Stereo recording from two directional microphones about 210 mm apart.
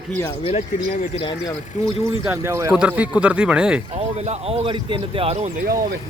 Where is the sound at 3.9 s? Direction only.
30° right (ahead or behind).